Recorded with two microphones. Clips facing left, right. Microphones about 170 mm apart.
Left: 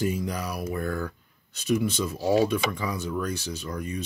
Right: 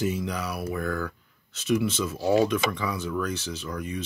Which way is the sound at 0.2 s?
35° left (ahead or behind).